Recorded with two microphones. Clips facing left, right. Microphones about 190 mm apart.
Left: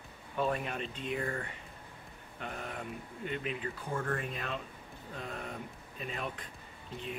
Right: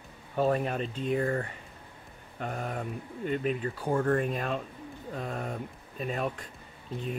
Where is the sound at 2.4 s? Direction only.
45° right (ahead or behind).